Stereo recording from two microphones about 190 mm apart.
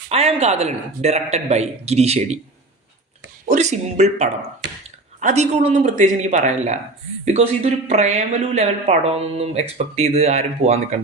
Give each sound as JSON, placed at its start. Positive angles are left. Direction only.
{"t": 0.1, "sound": "speech", "side_deg": -35}
{"t": 3.5, "sound": "speech", "side_deg": -35}